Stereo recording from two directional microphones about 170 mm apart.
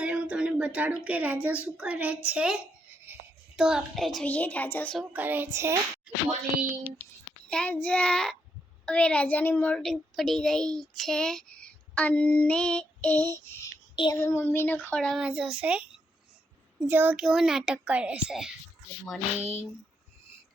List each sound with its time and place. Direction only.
0.0 s a child's voice: 5° right (ahead or behind); by 4.9 s 10° left (ahead or behind)
4.9 s music: 10° right (ahead or behind)
7.5 s child singing: 10° left (ahead or behind)
13.9 s child singing: 25° left (ahead or behind)
14.2 s speech: 15° left (ahead or behind); by 18.5 s 5° right (ahead or behind)